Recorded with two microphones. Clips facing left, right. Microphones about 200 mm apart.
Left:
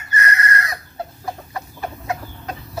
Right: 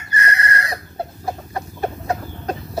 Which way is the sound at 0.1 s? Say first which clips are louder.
Left 1 dB; 30° right (ahead or behind).